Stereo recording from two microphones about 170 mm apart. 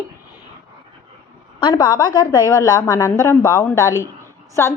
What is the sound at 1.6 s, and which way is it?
A woman's voice, 25° left (ahead or behind).